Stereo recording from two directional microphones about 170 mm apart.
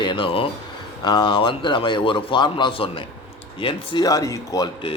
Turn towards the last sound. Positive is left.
turn(degrees=25)  # may be behind; listen again after turning